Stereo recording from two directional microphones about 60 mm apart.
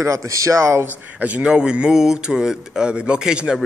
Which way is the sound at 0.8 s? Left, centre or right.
Right.